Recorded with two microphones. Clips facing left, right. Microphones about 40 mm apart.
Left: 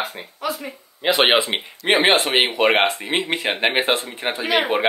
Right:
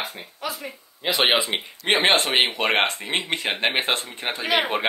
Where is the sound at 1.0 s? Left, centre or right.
Left.